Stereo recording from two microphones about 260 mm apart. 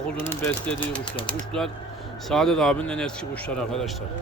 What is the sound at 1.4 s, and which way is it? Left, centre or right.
Speech, centre.